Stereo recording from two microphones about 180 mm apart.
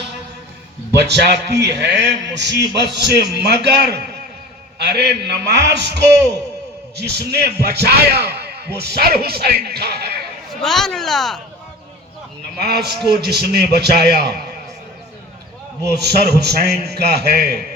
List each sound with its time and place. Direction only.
0.9 s a man's voice: 70° right (ahead or behind)
10.5 s speech: centre (ahead or behind)
12.5 s speech: 60° right (ahead or behind)
15.9 s speech: 65° right (ahead or behind)